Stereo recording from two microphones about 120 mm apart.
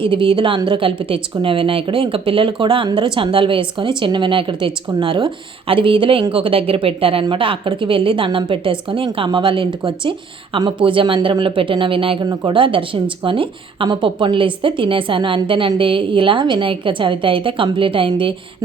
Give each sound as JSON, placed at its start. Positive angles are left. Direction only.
{"t": 0.0, "sound": "a woman's voice", "side_deg": -45}